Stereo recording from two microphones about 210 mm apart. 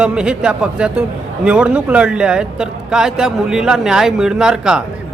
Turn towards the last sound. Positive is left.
turn(degrees=-5)  # may be behind; listen again after turning